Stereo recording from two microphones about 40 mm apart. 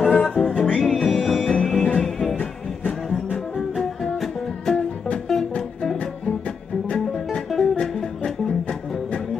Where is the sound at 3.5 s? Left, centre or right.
Centre.